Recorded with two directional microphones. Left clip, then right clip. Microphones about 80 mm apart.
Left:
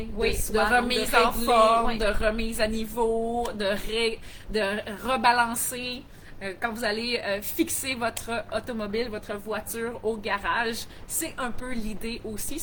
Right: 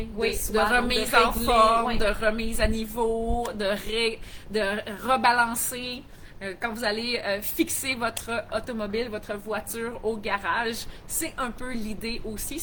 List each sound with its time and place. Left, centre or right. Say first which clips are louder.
0.2 s speech: even; centre
0.7 s a woman's voice: left 1 dB; right